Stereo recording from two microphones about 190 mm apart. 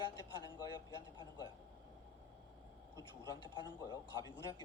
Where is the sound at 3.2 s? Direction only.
20° left (ahead or behind).